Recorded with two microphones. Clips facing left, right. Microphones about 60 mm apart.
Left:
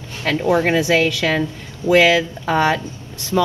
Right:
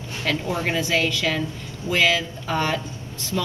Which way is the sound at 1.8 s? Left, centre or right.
Left.